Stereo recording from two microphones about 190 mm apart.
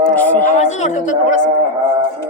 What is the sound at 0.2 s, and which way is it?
Speech, 10° left (ahead or behind).